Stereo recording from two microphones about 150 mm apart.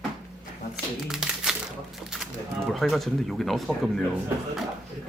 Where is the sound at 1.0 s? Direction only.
5° right (ahead or behind).